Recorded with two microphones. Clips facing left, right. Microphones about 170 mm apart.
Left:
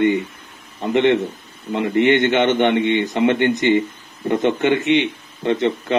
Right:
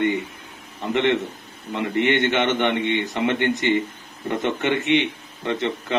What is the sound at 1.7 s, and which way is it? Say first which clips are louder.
Speech: left 5 dB; 20° left (ahead or behind).